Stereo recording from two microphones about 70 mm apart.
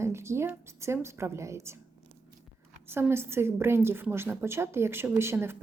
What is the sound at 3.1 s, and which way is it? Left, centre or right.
A woman's voice, right.